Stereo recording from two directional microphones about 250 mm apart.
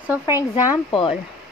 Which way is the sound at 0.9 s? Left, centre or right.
Centre.